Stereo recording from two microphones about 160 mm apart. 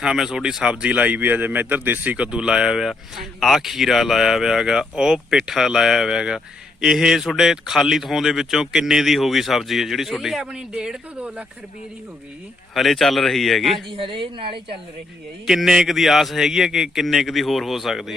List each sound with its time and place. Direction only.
0.0 s a man's voice: 5° right (ahead or behind)
12.7 s a man's voice: centre (ahead or behind)
13.9 s a woman's voice: 35° right (ahead or behind)
15.4 s a man's voice: 5° right (ahead or behind)